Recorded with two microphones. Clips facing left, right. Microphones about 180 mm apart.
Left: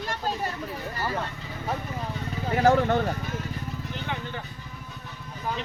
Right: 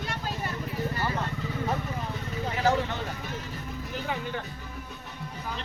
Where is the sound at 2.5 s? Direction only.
50° left (ahead or behind).